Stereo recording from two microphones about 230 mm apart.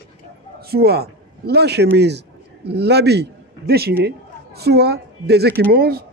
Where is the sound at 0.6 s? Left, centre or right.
Right.